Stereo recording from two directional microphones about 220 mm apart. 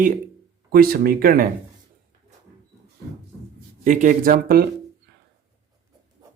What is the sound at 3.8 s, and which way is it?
Speech, 35° right (ahead or behind).